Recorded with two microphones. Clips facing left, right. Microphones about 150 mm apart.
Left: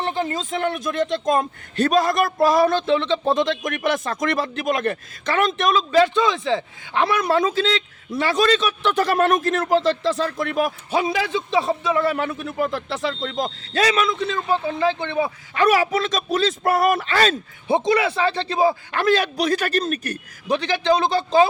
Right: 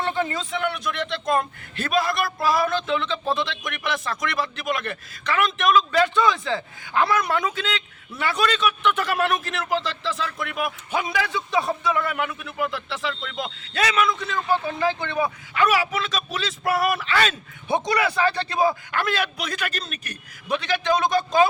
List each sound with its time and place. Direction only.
0.2 s a man's voice: 40° left (ahead or behind)
5.9 s a man's voice: 25° left (ahead or behind)
15.6 s a man's voice: 40° left (ahead or behind)